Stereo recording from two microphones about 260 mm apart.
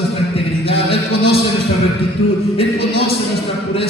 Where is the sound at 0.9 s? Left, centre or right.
Left.